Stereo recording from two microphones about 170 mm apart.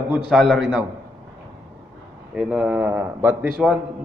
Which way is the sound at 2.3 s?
5° right (ahead or behind).